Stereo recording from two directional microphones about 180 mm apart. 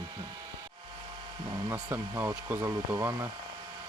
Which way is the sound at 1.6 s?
15° right (ahead or behind).